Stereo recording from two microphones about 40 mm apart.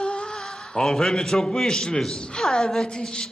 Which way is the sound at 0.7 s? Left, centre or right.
Centre.